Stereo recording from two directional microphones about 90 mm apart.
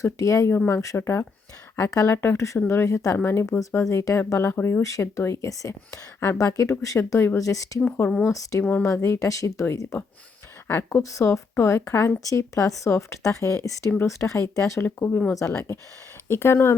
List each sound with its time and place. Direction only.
0.0 s speech: 35° left (ahead or behind)
2.1 s speech: 25° left (ahead or behind)
4.8 s speech: 35° left (ahead or behind)
7.8 s speech: 20° left (ahead or behind)
8.3 s speech: 35° left (ahead or behind)